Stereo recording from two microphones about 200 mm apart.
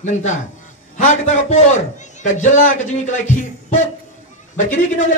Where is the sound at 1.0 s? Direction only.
35° left (ahead or behind).